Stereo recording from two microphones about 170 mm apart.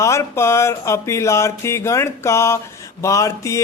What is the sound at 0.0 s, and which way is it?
Music, 15° left (ahead or behind).